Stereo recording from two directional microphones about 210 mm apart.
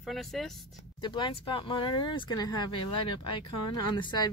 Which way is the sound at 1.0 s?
20° left (ahead or behind).